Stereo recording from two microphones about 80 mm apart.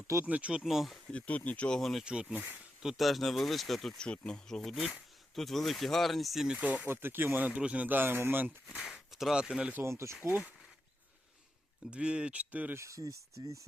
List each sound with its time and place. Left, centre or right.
0.3 s speech: centre
0.6 s speech: centre
1.0 s speech: centre
1.8 s speech: centre
6.6 s speech: centre
6.8 s speech: right
8.8 s speech: centre
9.8 s speech: right
10.2 s speech: centre
11.9 s speech: centre
12.7 s speech: right